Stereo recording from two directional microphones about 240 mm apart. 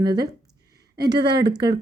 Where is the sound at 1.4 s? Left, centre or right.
Centre.